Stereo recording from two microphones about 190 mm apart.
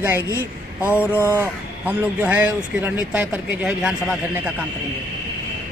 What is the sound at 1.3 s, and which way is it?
Speech, 10° right (ahead or behind).